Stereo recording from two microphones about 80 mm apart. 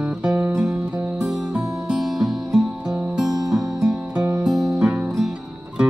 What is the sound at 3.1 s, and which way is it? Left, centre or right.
Music, centre.